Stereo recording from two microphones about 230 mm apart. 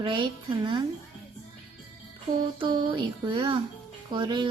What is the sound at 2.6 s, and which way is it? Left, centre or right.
A woman's voice, right.